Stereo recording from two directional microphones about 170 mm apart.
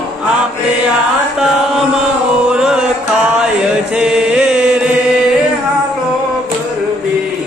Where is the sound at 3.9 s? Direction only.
5° right (ahead or behind).